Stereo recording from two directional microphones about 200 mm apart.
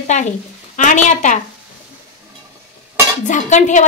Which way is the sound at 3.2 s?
40° left (ahead or behind).